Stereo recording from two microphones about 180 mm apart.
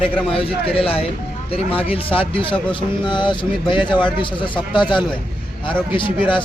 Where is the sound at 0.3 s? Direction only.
30° left (ahead or behind).